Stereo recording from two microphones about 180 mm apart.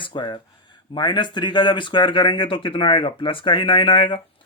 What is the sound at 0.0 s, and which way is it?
Speech, 25° left (ahead or behind).